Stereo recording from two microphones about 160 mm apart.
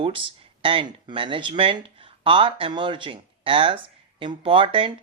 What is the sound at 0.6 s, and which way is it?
Speech, 35° right (ahead or behind).